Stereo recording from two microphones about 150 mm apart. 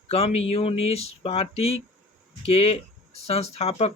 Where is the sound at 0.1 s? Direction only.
45° left (ahead or behind).